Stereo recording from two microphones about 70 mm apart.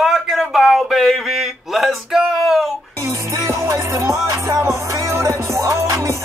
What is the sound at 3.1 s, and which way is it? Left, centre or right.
Music, right.